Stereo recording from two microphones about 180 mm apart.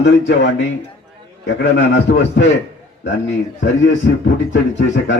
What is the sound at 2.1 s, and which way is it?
Speech, 75° left (ahead or behind).